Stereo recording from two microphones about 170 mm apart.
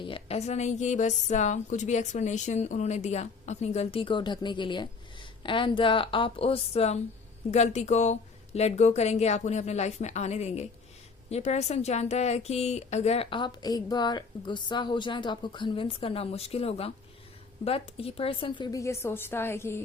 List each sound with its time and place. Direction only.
0.0 s a woman's voice: 35° left (ahead or behind); by 19.8 s 15° left (ahead or behind)